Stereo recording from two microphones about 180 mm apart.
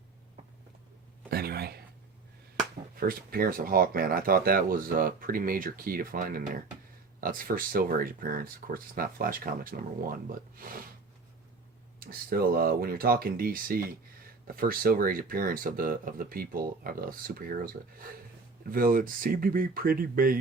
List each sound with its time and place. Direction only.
1.3 s a sound: 60° right (ahead or behind)
2.9 s speech: 55° right (ahead or behind)
11.9 s speech: 55° right (ahead or behind)